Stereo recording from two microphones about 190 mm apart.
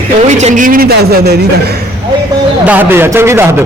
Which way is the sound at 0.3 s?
35° right (ahead or behind).